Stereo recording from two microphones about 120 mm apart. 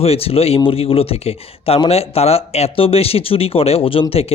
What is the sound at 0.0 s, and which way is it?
Speech, 55° left (ahead or behind).